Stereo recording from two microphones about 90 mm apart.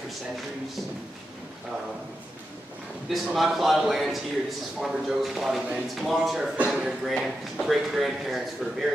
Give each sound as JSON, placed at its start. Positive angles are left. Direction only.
{"t": 3.1, "sound": "speech", "side_deg": -5}